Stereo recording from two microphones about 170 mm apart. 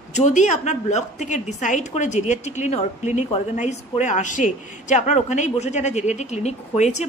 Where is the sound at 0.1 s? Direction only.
45° left (ahead or behind).